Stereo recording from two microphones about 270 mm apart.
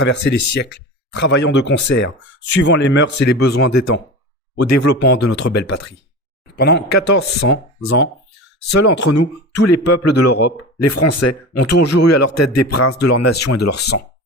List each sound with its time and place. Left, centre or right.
0.2 s speech: left
4.7 s speech: left
6.6 s speech: left
6.9 s speech: left
7.2 s speech: left
8.7 s speech: left